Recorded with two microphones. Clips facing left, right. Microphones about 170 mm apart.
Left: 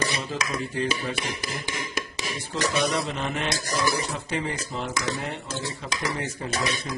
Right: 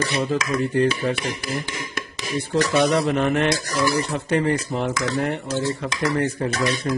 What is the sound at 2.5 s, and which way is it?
Speech, 60° right (ahead or behind).